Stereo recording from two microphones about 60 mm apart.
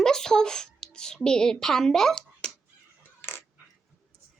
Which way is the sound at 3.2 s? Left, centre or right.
Left.